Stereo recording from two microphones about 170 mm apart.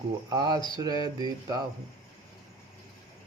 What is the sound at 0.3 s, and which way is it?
Mantra, 25° right (ahead or behind).